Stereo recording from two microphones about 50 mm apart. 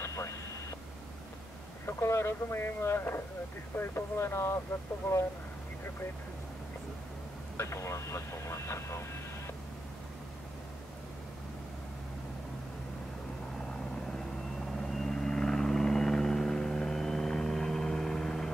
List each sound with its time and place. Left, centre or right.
0.0 s a sound: left
2.0 s speech: left
7.5 s speech: left
14.8 s vehicle: centre